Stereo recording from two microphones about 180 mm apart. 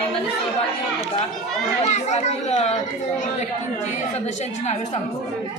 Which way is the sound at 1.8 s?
40° left (ahead or behind).